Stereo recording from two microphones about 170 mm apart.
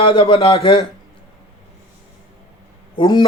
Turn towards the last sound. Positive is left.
turn(degrees=25)  # may be behind; listen again after turning